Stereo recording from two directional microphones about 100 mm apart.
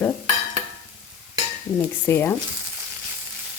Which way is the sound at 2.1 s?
20° left (ahead or behind).